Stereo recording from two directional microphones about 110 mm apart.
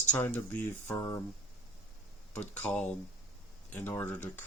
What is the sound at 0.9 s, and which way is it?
Speech, 25° left (ahead or behind).